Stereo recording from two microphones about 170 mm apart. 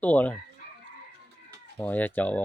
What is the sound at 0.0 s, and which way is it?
Speech, 10° left (ahead or behind).